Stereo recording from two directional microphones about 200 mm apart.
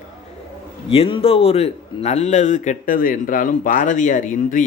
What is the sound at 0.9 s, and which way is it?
A man's voice, 25° left (ahead or behind).